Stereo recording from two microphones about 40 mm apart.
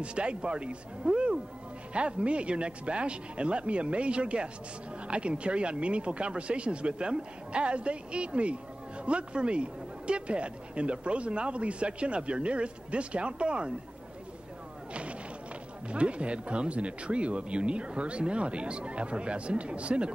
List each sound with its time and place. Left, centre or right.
0.0 s speech: right
15.9 s speech: right